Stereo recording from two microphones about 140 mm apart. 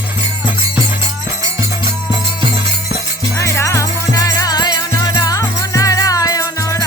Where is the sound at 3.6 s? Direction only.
20° left (ahead or behind).